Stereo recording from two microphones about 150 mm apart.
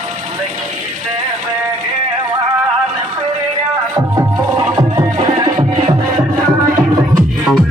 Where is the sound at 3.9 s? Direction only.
20° right (ahead or behind).